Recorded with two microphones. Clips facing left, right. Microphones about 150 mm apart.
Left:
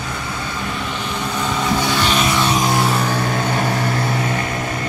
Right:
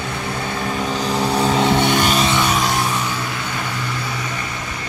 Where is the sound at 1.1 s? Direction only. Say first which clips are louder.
Right 6 dB; 35° right (ahead or behind).